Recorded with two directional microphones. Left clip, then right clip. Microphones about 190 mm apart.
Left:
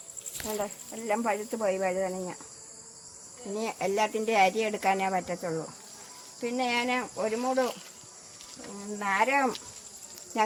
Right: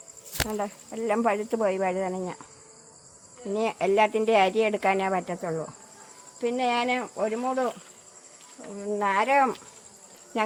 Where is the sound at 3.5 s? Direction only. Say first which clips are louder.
Right 6 dB; 50° right (ahead or behind).